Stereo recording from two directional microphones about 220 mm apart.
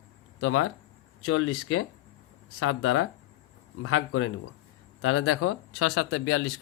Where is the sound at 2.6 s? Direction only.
75° left (ahead or behind).